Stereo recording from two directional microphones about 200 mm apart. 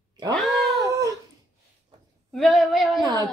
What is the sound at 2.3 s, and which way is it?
Speech, centre (ahead or behind).